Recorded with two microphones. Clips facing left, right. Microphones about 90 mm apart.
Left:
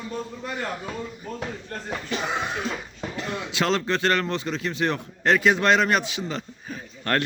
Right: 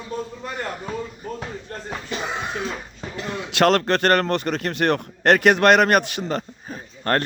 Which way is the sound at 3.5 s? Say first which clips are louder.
Right 7 dB; 65° right (ahead or behind).